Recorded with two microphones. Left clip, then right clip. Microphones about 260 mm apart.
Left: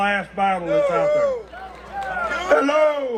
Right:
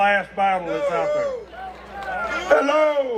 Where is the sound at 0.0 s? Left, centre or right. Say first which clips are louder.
Right 2 dB; right.